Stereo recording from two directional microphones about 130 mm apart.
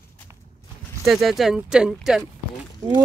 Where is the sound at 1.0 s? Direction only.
Centre (ahead or behind).